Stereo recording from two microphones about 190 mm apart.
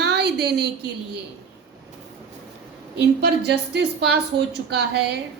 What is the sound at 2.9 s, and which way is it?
A woman's voice, 60° right (ahead or behind).